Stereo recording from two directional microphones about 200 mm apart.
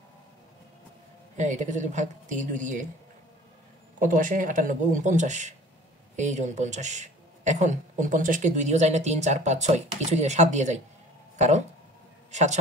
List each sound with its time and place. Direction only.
1.3 s speech: 35° right (ahead or behind)
4.0 s a man's voice: 40° right (ahead or behind)